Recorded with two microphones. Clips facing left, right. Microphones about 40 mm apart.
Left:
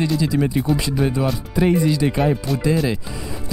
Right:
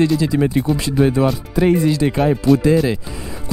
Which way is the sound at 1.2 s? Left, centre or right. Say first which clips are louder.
Right 3 dB; centre.